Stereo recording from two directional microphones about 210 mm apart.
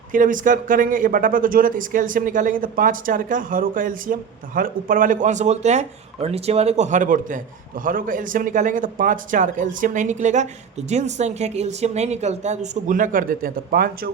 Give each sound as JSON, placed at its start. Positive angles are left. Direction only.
{"t": 0.1, "sound": "speech", "side_deg": -40}